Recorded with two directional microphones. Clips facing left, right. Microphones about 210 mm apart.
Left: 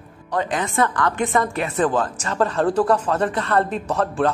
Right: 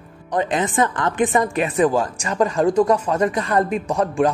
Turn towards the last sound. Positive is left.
turn(degrees=-10)  # may be behind; listen again after turning